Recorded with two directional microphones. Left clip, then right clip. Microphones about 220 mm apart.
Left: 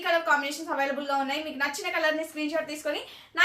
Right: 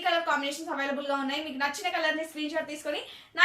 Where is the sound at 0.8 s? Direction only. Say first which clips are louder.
Left 3 dB; 20° left (ahead or behind).